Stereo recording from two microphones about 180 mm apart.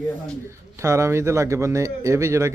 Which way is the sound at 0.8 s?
15° right (ahead or behind).